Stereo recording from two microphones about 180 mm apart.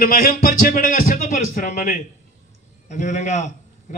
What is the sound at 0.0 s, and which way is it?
A man's voice, 55° left (ahead or behind).